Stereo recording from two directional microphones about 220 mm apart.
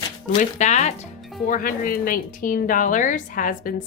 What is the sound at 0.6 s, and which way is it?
A woman's voice, 30° left (ahead or behind).